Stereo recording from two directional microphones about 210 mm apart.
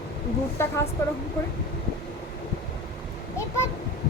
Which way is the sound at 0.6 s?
10° left (ahead or behind).